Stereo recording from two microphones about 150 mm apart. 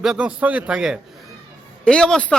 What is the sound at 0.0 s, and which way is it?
Speech, 5° right (ahead or behind).